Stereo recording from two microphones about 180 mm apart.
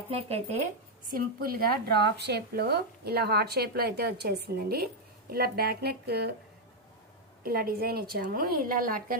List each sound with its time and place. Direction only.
0.1 s speech: 35° right (ahead or behind)
1.1 s speech: 55° right (ahead or behind)
7.4 s speech: 55° right (ahead or behind)